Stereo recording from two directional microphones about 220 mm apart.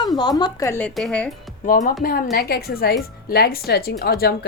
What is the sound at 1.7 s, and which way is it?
A woman's voice, 40° left (ahead or behind).